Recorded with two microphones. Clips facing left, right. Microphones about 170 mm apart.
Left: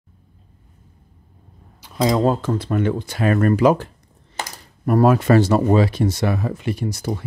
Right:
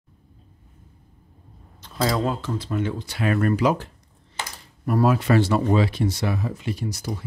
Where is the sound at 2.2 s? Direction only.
55° left (ahead or behind).